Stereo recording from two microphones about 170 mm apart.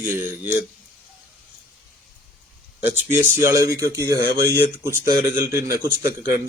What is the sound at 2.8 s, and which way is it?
A man's voice, 10° right (ahead or behind).